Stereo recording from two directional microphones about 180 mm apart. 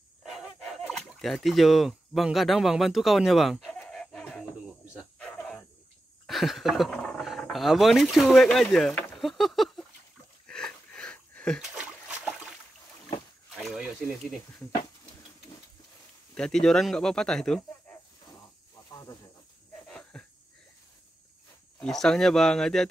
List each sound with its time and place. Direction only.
0.2 s fowl: centre (ahead or behind)
5.2 s dog: 5° left (ahead or behind)
6.2 s speech: centre (ahead or behind)
10.5 s a sound: 5° left (ahead or behind)
13.6 s a sound: centre (ahead or behind)
16.3 s speech: 5° left (ahead or behind)
18.8 s snake: 20° left (ahead or behind)
19.9 s a sound: 5° left (ahead or behind)
21.7 s speech: 5° left (ahead or behind)